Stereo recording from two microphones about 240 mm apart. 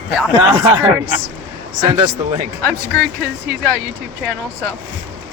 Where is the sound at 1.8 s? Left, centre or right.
Right.